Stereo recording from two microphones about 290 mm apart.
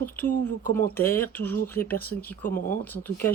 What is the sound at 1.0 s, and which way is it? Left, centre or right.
Speech, centre.